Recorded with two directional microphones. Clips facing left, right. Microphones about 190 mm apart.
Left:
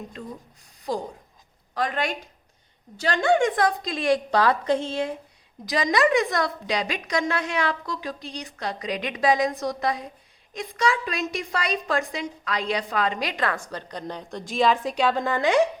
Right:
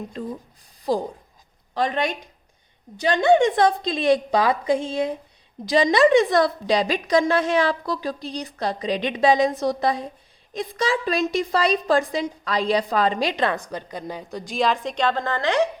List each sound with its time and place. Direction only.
0.8 s a woman's voice: 30° right (ahead or behind); by 5.1 s 15° right (ahead or behind)
5.6 s a woman's voice: 30° right (ahead or behind); by 15.6 s 15° left (ahead or behind)